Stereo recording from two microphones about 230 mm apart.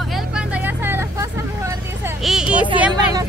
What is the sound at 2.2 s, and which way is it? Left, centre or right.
Speech, centre.